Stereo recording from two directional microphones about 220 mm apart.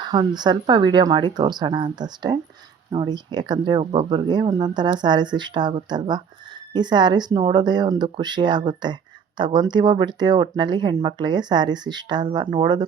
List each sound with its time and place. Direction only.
0.0 s speech: 20° right (ahead or behind)